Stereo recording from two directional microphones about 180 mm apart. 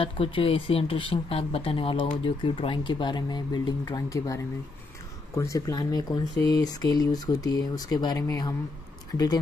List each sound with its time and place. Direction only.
0.0 s speech: 30° left (ahead or behind)